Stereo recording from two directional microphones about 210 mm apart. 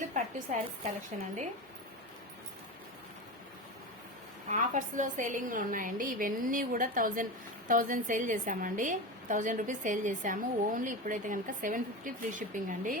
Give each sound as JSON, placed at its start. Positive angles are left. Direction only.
{"t": 0.0, "sound": "a woman's voice", "side_deg": -35}
{"t": 4.4, "sound": "a woman's voice", "side_deg": -35}